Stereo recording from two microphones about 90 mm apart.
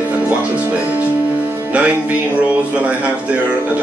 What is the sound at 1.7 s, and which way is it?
Music, 15° right (ahead or behind).